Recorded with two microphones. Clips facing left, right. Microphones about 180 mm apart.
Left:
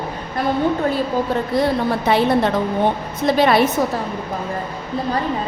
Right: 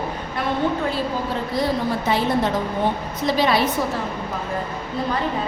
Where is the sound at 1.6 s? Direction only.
65° left (ahead or behind).